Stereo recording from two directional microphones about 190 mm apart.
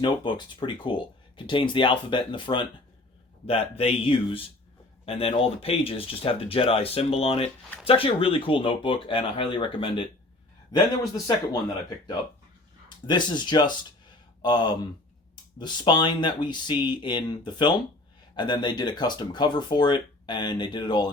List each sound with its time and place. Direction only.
0.0 s speech: 25° left (ahead or behind)
13.1 s speech: 25° left (ahead or behind)